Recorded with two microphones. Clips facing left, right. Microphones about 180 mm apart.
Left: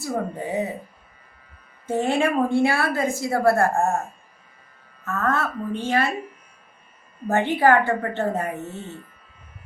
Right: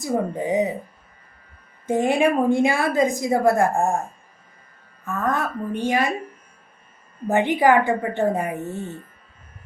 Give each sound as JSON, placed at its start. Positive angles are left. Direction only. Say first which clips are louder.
{"t": 0.0, "sound": "a woman's voice", "louder": "right 4 dB", "side_deg": -15}
{"t": 1.9, "sound": "a woman's voice", "louder": "right 3 dB", "side_deg": -15}
{"t": 5.0, "sound": "a woman's voice", "louder": "even", "side_deg": -15}
{"t": 7.3, "sound": "a woman's voice", "louder": "right 1 dB", "side_deg": -15}
{"t": 8.7, "sound": "speech", "louder": "right 4 dB", "side_deg": -50}